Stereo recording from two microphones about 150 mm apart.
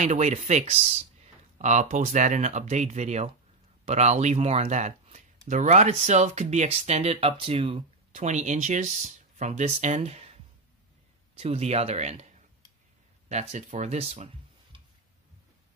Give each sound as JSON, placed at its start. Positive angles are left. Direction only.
{"t": 0.0, "sound": "speech", "side_deg": -50}
{"t": 11.3, "sound": "speech", "side_deg": -40}
{"t": 13.3, "sound": "speech", "side_deg": -50}